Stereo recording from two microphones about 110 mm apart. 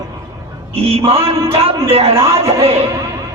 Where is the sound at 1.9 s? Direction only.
65° right (ahead or behind).